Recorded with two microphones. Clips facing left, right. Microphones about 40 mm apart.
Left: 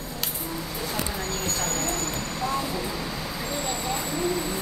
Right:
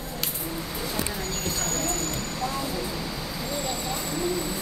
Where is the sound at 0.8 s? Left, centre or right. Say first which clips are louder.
Left 1 dB; centre.